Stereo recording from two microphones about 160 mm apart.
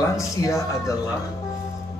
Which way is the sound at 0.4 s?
20° left (ahead or behind).